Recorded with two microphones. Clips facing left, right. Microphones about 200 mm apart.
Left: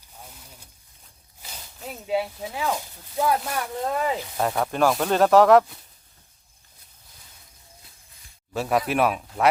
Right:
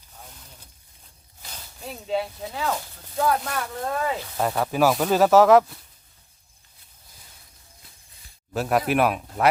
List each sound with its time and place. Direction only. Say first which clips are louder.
0.2 s a sound: left 1 dB; 5° left (ahead or behind)
1.4 s speech: even; 10° left (ahead or behind)
4.4 s speech: right 1 dB; centre (ahead or behind)
8.5 s speech: right 1 dB; centre (ahead or behind)